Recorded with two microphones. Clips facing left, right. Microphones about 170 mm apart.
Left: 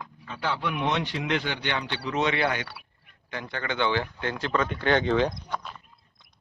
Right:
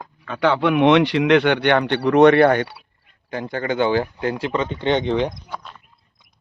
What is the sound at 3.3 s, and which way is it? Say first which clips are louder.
Speech: right 9 dB; 40° right (ahead or behind).